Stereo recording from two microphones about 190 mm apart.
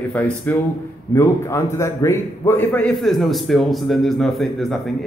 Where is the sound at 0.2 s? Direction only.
5° left (ahead or behind).